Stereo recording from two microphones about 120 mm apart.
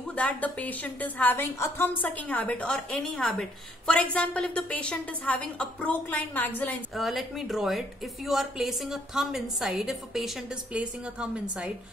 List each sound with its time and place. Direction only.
0.1 s a woman's voice: 10° left (ahead or behind)
7.0 s a woman's voice: centre (ahead or behind)